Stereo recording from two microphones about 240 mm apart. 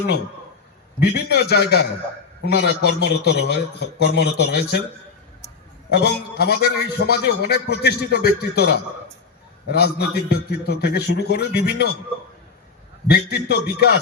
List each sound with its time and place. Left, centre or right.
0.9 s a man's voice: left
5.9 s a man's voice: left
13.1 s a man's voice: left